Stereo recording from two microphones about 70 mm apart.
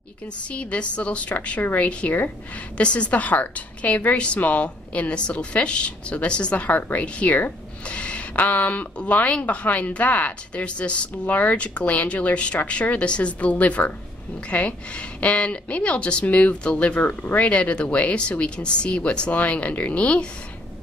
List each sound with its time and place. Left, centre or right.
0.5 s a woman's voice: centre